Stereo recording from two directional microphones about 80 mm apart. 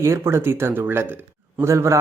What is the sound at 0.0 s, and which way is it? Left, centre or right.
Speech, right.